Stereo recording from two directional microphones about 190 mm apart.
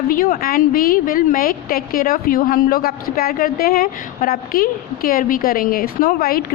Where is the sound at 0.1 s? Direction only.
45° left (ahead or behind).